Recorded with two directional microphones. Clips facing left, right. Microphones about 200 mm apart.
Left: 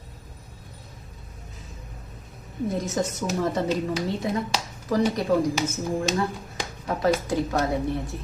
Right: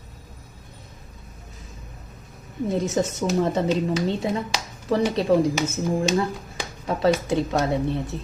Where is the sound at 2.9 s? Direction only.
25° right (ahead or behind).